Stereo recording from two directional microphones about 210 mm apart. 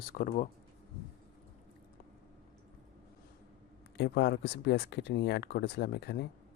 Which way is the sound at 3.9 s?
50° left (ahead or behind).